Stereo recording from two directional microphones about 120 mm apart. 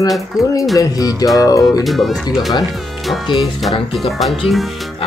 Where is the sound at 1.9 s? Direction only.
Centre (ahead or behind).